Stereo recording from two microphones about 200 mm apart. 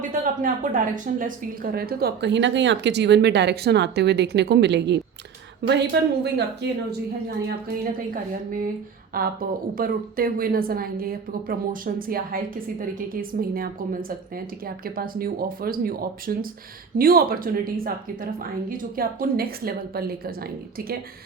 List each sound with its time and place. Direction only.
0.1 s speech: 40° right (ahead or behind); by 6.7 s 60° right (ahead or behind)
9.1 s a woman's voice: 45° right (ahead or behind)
13.4 s a woman's voice: 45° right (ahead or behind)